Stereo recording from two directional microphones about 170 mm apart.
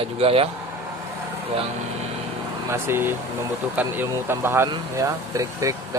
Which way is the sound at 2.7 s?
15° right (ahead or behind).